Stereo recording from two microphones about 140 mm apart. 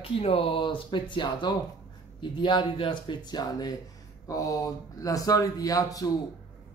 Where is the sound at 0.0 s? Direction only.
40° left (ahead or behind).